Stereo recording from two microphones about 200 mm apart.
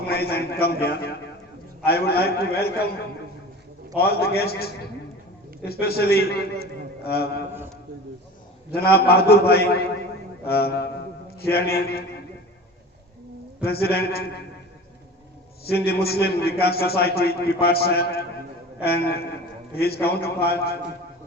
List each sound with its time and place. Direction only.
0.1 s a man's voice: 50° left (ahead or behind)
3.9 s a man's voice: 50° left (ahead or behind)
8.7 s a man's voice: 50° left (ahead or behind)
13.6 s a man's voice: 50° left (ahead or behind)
15.6 s a man's voice: 50° left (ahead or behind)